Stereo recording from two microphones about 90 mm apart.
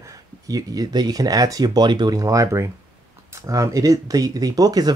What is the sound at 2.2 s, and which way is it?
Speech, 40° right (ahead or behind).